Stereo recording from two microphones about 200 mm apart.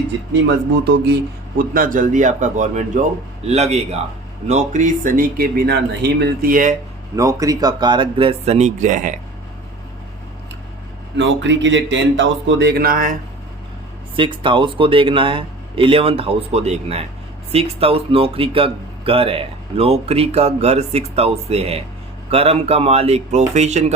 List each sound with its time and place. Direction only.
1.5 s speech: 45° right (ahead or behind)
7.2 s speech: 15° right (ahead or behind); by 9.1 s 40° right (ahead or behind)
11.2 s speech: 65° right (ahead or behind); by 13.1 s 45° right (ahead or behind)
14.2 s speech: 25° right (ahead or behind)